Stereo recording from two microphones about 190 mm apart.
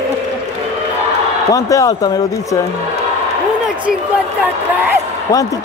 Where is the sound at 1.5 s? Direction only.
15° left (ahead or behind).